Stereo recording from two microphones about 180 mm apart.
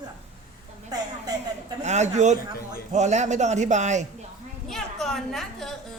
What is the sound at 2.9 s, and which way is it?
A man's voice, 40° right (ahead or behind).